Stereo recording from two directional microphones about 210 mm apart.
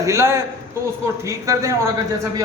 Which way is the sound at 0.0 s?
15° right (ahead or behind).